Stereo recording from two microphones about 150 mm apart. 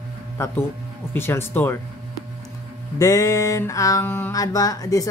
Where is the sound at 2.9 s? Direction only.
20° left (ahead or behind).